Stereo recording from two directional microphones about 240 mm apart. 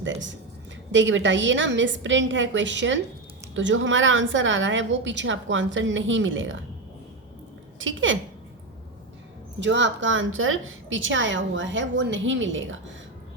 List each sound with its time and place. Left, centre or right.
0.0 s a woman's voice: right
7.8 s a woman's voice: right
9.6 s a woman's voice: right